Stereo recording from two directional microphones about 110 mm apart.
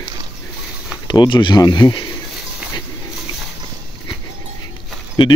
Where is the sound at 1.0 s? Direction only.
40° left (ahead or behind).